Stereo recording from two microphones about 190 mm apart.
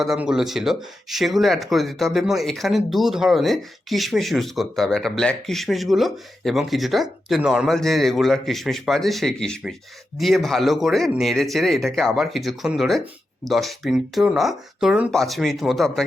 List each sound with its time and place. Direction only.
0.0 s speech: centre (ahead or behind)